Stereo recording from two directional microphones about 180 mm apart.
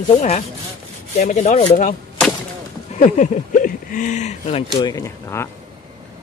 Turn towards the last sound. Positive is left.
turn(degrees=15)  # may be behind; listen again after turning